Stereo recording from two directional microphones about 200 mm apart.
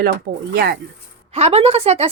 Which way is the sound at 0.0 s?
50° right (ahead or behind).